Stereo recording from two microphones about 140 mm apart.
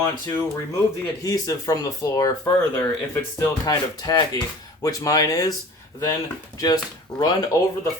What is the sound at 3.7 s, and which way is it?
Speech, 25° left (ahead or behind).